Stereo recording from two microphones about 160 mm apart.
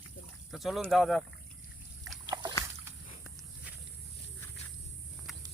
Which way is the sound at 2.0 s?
25° right (ahead or behind).